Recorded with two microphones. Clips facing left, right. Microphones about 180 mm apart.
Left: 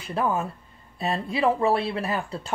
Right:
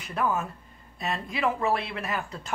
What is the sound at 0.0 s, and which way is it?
Speech, 30° left (ahead or behind).